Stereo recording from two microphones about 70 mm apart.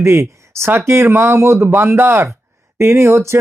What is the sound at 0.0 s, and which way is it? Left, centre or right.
Speech, right.